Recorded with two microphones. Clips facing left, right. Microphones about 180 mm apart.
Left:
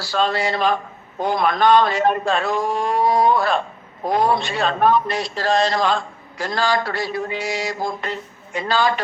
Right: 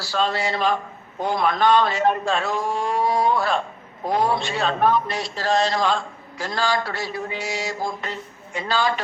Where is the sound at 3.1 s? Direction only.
55° left (ahead or behind).